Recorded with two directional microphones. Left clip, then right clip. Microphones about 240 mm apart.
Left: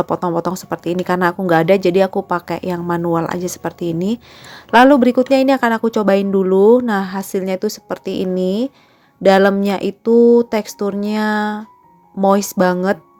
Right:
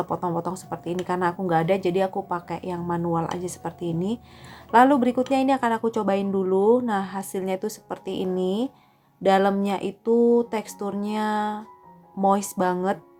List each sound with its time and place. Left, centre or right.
0.0 s a woman's voice: left